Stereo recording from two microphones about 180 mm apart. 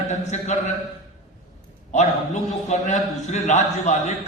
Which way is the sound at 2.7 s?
40° left (ahead or behind).